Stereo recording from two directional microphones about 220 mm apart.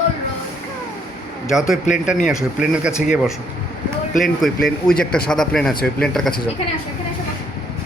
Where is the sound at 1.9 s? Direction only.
35° left (ahead or behind).